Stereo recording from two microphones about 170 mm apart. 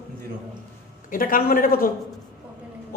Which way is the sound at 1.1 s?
55° left (ahead or behind).